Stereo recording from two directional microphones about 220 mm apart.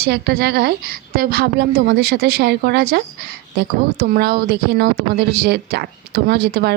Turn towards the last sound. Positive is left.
turn(degrees=-45)  # may be behind; listen again after turning